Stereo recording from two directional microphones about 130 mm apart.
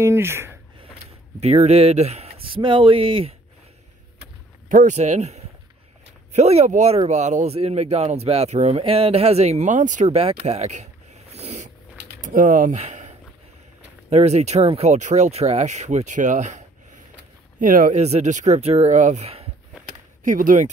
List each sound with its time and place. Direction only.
0.0 s speech: 20° right (ahead or behind)
1.4 s speech: 55° right (ahead or behind)
4.6 s speech: 80° right; by 11.7 s 60° right (ahead or behind)
12.2 s speech: 85° right; by 13.1 s 65° right (ahead or behind)
14.1 s speech: 55° right (ahead or behind)
17.6 s speech: 90° right
18.0 s speech: 60° right (ahead or behind)
20.2 s speech: 90° right